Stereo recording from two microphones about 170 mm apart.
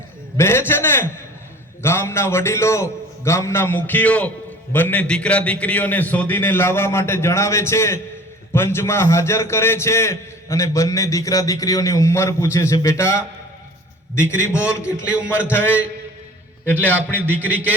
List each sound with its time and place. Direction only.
0.3 s a sound: 15° left (ahead or behind)
0.7 s a man's voice: 15° left (ahead or behind)
17.2 s a man's voice: 10° right (ahead or behind)